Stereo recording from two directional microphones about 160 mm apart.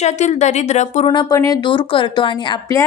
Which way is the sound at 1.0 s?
30° left (ahead or behind).